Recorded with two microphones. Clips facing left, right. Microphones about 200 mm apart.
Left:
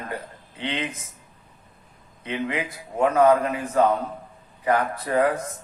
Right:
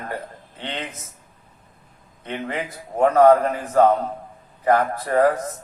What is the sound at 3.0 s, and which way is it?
A man's voice, 35° right (ahead or behind).